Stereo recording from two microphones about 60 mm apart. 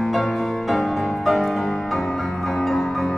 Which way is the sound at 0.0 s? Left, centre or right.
Centre.